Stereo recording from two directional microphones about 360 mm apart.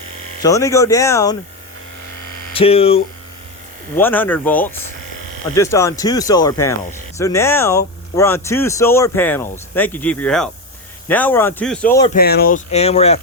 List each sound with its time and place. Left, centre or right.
0.4 s speech: centre
2.5 s hum: centre
3.9 s a man's voice: centre
12.1 s speech: left